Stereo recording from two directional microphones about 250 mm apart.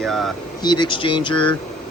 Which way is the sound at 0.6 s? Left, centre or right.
Centre.